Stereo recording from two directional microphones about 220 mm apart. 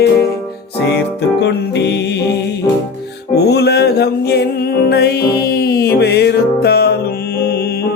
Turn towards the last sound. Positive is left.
turn(degrees=45)  # may be behind; listen again after turning